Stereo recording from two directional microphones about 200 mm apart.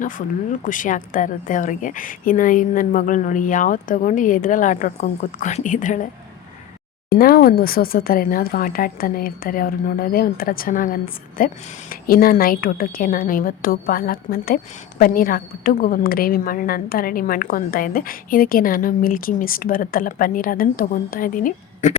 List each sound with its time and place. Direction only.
0.0 s speech: 40° left (ahead or behind)
7.1 s speech: 50° left (ahead or behind)